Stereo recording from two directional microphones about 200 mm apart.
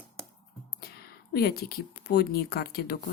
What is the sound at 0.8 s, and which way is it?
Speech, 50° left (ahead or behind).